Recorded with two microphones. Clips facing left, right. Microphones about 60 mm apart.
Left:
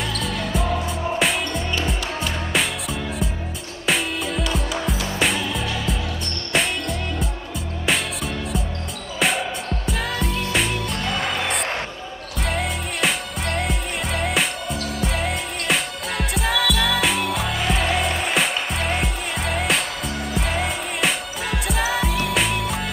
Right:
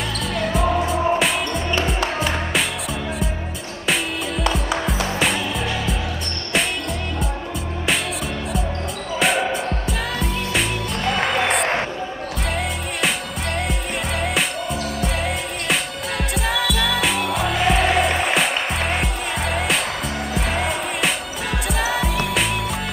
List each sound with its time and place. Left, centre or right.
0.2 s music: centre
4.4 s music: right
5.2 s music: centre
9.2 s music: centre